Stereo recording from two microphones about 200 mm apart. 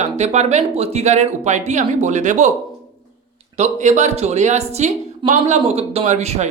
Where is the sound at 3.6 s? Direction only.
35° right (ahead or behind).